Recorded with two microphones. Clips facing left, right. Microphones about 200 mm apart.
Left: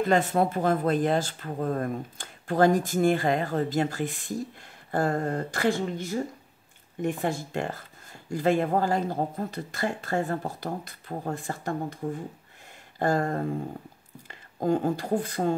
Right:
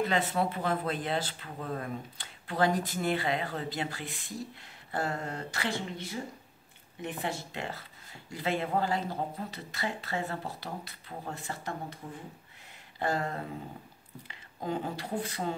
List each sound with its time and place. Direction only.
0.0 s speech: 50° left (ahead or behind)
13.0 s speech: 45° left (ahead or behind)